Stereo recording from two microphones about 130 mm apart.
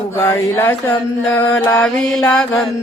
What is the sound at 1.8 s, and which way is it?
Speech, 5° left (ahead or behind).